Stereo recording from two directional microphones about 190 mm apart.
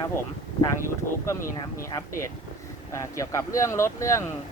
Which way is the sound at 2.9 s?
15° left (ahead or behind).